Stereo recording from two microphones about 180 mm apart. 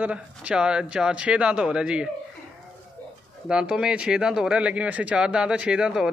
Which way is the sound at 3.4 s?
5° right (ahead or behind).